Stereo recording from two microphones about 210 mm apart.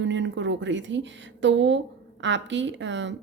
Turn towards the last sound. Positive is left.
turn(degrees=-60)  # may be behind; listen again after turning